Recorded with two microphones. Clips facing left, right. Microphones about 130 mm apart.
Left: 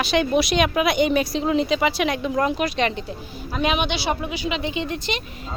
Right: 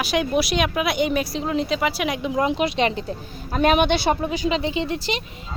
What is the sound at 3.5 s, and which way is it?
Speech, 45° right (ahead or behind).